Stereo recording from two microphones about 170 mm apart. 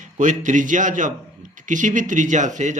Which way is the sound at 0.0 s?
45° right (ahead or behind).